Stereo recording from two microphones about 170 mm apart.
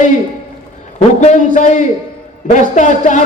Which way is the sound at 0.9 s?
45° left (ahead or behind).